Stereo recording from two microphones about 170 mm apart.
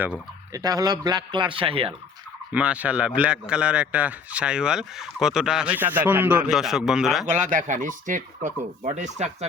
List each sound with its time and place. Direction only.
0.5 s speech: 20° right (ahead or behind)
2.5 s speech: 10° right (ahead or behind)
7.3 s speech: 45° right (ahead or behind)